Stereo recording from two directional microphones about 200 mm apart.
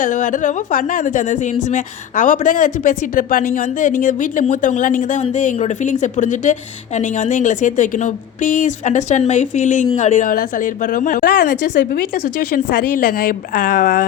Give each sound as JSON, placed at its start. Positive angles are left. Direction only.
{"t": 0.0, "sound": "a woman's voice", "side_deg": 40}